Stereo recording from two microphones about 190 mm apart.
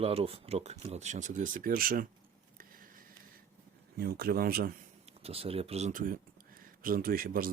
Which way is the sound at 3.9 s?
55° right (ahead or behind).